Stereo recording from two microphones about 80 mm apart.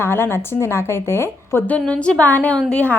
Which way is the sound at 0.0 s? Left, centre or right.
Left.